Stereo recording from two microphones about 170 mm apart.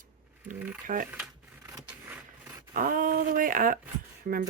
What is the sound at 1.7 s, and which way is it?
Scrape, 15° right (ahead or behind).